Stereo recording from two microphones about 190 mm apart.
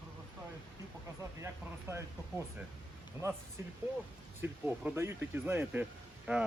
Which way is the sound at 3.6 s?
15° right (ahead or behind).